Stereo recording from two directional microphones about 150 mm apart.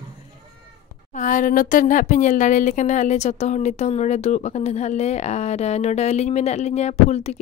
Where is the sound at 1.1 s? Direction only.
60° left (ahead or behind).